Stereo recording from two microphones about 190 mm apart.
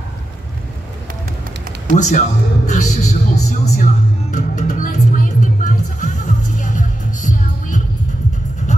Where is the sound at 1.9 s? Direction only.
40° left (ahead or behind).